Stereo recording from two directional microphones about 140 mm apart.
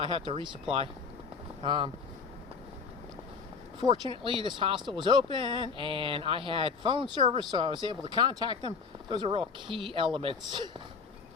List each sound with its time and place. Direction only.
0.0 s speech: 35° right (ahead or behind)
1.6 s speech: 35° right (ahead or behind)
4.0 s speech: 35° right (ahead or behind)